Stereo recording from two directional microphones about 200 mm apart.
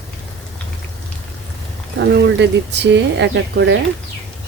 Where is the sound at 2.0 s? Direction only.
60° right (ahead or behind).